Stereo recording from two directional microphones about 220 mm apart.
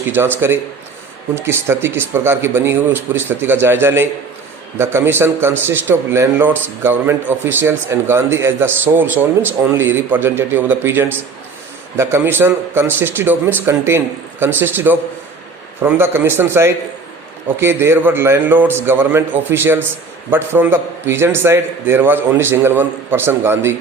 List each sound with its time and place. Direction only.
0.0 s a man's voice: 10° right (ahead or behind)